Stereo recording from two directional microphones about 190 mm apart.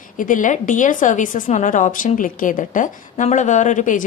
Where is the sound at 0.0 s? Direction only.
45° left (ahead or behind).